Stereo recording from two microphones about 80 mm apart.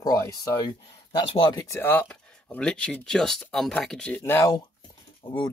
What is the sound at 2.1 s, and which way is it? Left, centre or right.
Speech, centre.